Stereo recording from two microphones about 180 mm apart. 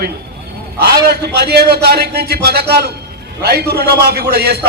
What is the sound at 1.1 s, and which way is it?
A man's voice, 65° right (ahead or behind).